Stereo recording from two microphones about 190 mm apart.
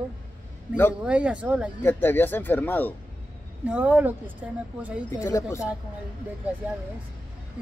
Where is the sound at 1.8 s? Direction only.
10° left (ahead or behind).